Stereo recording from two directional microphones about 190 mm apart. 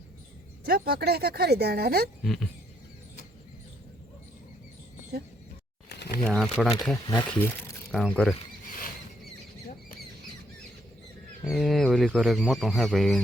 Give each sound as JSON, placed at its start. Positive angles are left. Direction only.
{"t": 0.6, "sound": "speech", "side_deg": -55}
{"t": 2.2, "sound": "speech", "side_deg": 5}
{"t": 6.2, "sound": "speech", "side_deg": 5}
{"t": 11.4, "sound": "speech", "side_deg": 0}